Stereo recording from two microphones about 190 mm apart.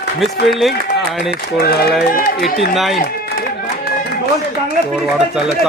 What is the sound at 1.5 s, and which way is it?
A man's voice, 55° left (ahead or behind).